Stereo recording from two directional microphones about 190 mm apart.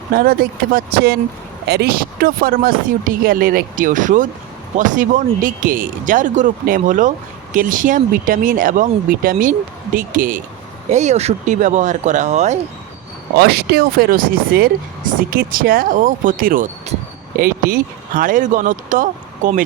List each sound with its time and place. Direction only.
0.1 s speech: 50° right (ahead or behind)
13.3 s speech: 55° right (ahead or behind); by 17.0 s 40° right (ahead or behind)
17.3 s speech: 50° right (ahead or behind)